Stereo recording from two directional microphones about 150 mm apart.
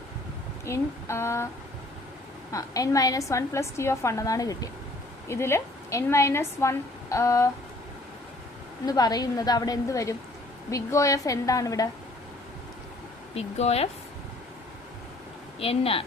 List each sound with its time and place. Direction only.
0.6 s a woman's voice: 20° left (ahead or behind)
2.5 s a woman's voice: 20° left (ahead or behind)
8.9 s a woman's voice: 25° left (ahead or behind)
13.3 s speech: 45° left (ahead or behind)
15.6 s speech: 40° left (ahead or behind)